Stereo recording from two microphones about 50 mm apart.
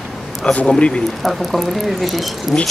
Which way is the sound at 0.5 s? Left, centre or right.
Left.